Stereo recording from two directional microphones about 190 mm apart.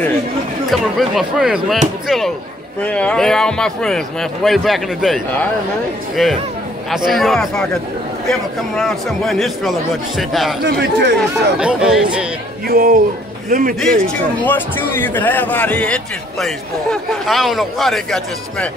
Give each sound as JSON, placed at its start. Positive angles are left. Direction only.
{"t": 0.7, "sound": "speech", "side_deg": 0}
{"t": 10.6, "sound": "speech", "side_deg": -60}
{"t": 11.1, "sound": "speech", "side_deg": -5}
{"t": 12.6, "sound": "speech", "side_deg": -50}
{"t": 14.4, "sound": "a man's voice", "side_deg": 10}